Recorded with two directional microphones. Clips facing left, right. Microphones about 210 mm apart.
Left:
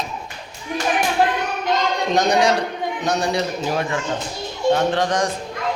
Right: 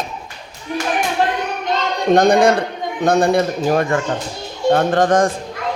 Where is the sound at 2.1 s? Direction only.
55° right (ahead or behind).